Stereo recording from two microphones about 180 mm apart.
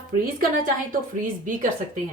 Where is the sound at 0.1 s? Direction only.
50° right (ahead or behind).